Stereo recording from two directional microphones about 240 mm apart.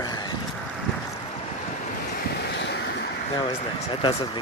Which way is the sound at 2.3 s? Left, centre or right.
Left.